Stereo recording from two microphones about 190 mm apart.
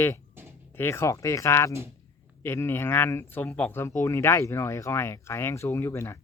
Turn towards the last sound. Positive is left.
turn(degrees=15)  # may be behind; listen again after turning